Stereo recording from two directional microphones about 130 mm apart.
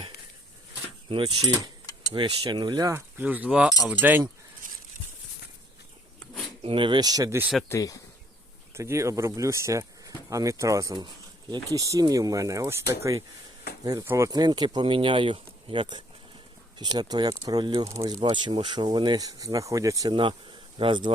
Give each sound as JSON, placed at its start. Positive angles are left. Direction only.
{"t": 1.1, "sound": "speech", "side_deg": -35}
{"t": 2.9, "sound": "speech", "side_deg": -15}
{"t": 4.6, "sound": "a sound", "side_deg": -90}
{"t": 6.6, "sound": "speech", "side_deg": -45}
{"t": 7.7, "sound": "speech", "side_deg": 25}
{"t": 8.7, "sound": "speech", "side_deg": -20}
{"t": 14.3, "sound": "speech", "side_deg": -30}
{"t": 18.2, "sound": "speech", "side_deg": -35}
{"t": 20.7, "sound": "speech", "side_deg": -40}